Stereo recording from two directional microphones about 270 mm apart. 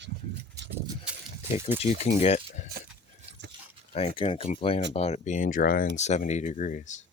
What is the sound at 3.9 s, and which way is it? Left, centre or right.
Speech, left.